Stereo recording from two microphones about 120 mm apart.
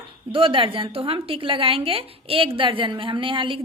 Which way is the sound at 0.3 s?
50° right (ahead or behind).